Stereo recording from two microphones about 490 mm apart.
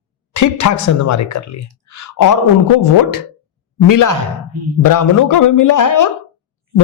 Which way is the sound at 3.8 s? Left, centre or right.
Left.